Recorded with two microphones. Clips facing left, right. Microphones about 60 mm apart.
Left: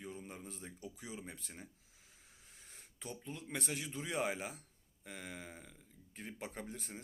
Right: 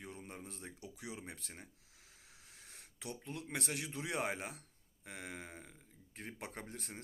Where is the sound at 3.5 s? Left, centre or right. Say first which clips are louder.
Even; right.